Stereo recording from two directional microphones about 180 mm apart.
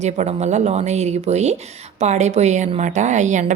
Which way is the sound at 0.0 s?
40° right (ahead or behind).